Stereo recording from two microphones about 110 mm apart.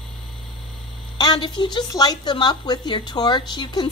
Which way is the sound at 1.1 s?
40° left (ahead or behind).